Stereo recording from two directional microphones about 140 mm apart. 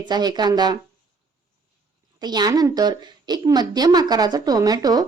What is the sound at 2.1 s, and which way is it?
A woman's voice, 30° right (ahead or behind).